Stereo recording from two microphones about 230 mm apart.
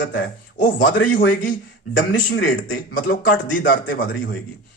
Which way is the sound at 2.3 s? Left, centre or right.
Left.